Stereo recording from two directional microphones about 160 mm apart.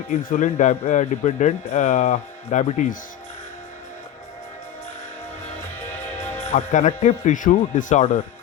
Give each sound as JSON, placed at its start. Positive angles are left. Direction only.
{"t": 0.1, "sound": "speech", "side_deg": 50}
{"t": 6.3, "sound": "speech", "side_deg": 45}